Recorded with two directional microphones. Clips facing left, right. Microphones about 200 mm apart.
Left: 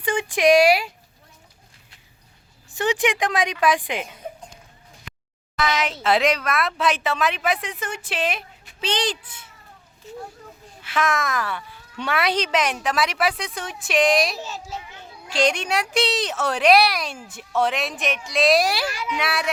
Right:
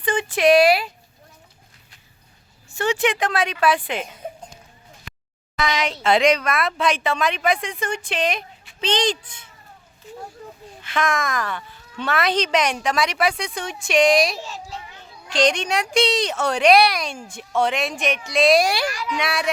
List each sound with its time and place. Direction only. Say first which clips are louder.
0.0 s a sound: right 1 dB; 10° left (ahead or behind)
2.6 s a woman's voice: right 1 dB; 15° left (ahead or behind)
5.5 s a woman's voice: even; 5° left (ahead or behind)
10.8 s a woman's voice: even; 5° left (ahead or behind)
18.9 s a woman's voice: right 1 dB; 25° left (ahead or behind)
19.1 s a woman's voice: even; 5° left (ahead or behind)